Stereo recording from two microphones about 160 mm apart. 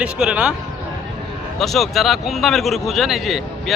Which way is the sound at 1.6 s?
Centre (ahead or behind).